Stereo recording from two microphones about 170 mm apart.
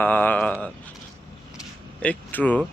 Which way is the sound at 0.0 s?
10° left (ahead or behind).